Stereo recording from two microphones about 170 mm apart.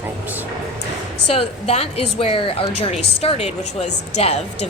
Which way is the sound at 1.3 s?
35° left (ahead or behind).